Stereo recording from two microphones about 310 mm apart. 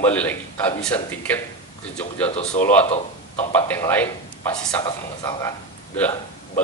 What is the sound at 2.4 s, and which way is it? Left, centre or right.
Speech, left.